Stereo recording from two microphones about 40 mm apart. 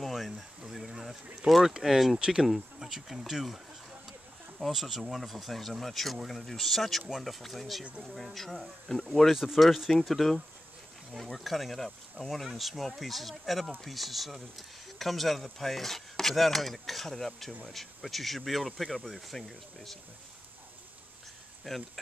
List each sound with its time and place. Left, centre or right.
0.0 s a sound: centre
1.8 s speech: centre
2.1 s speech: right; by 9.4 s centre
9.4 s speech: centre
21.7 s speech: centre